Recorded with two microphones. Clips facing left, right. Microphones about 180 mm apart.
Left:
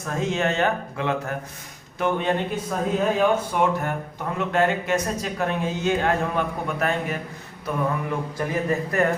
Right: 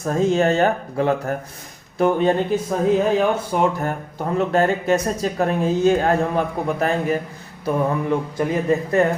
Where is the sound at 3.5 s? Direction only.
40° right (ahead or behind).